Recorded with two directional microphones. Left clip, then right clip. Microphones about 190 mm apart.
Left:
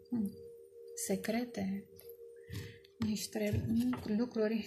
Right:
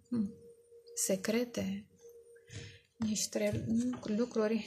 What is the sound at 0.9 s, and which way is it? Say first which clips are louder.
Speech: right 4 dB; 55° right (ahead or behind).